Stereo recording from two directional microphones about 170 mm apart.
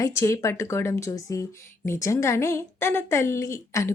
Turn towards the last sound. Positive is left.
turn(degrees=15)  # may be behind; listen again after turning